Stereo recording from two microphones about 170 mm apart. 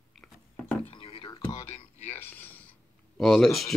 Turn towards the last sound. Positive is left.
turn(degrees=0)  # may be behind; listen again after turning